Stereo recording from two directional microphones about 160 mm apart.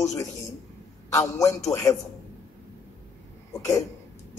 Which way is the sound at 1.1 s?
20° left (ahead or behind).